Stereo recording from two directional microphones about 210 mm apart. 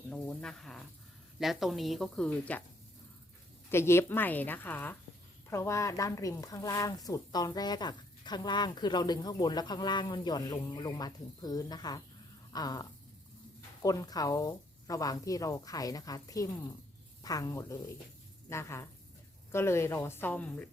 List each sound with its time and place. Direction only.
0.1 s a woman's voice: 5° left (ahead or behind)
3.7 s speech: 10° left (ahead or behind)